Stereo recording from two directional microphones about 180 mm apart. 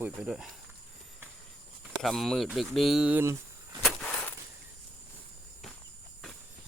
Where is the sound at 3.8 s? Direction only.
5° left (ahead or behind).